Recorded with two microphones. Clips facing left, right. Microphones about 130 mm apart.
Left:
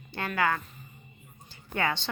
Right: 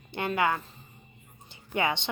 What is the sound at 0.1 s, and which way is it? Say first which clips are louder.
Speech: right 1 dB; 20° right (ahead or behind).